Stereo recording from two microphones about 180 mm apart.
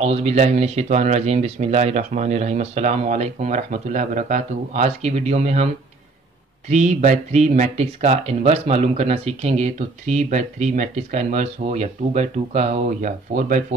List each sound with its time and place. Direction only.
0.0 s speech: 35° right (ahead or behind)
6.7 s speech: 40° right (ahead or behind)